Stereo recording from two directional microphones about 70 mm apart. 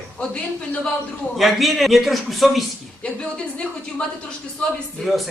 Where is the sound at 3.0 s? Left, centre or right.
Centre.